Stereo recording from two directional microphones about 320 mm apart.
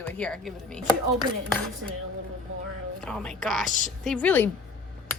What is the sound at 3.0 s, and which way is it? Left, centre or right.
A woman's voice, centre.